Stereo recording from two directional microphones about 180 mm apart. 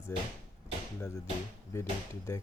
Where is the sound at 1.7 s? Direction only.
15° left (ahead or behind).